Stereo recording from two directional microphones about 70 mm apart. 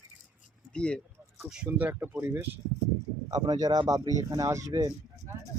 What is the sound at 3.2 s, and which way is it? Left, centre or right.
Speech, right.